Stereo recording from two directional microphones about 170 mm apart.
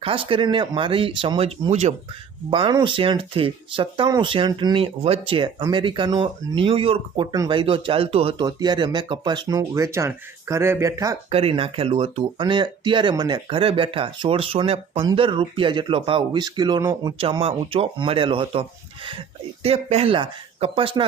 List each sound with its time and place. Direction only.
0.0 s speech: 30° right (ahead or behind)
2.5 s speech: 30° right (ahead or behind)
11.3 s speech: 35° right (ahead or behind)
19.6 s speech: 35° right (ahead or behind)